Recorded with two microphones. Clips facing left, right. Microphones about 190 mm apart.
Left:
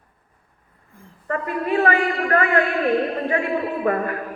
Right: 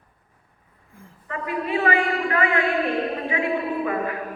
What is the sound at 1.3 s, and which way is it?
A man's voice, 50° left (ahead or behind).